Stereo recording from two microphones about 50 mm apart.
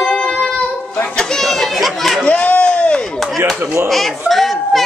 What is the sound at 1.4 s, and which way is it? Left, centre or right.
Chatter, centre.